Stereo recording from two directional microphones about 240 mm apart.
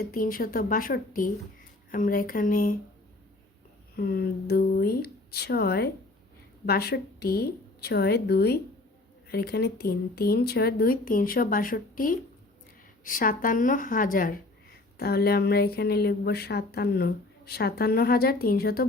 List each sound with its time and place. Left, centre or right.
0.0 s speech: left
3.9 s speech: left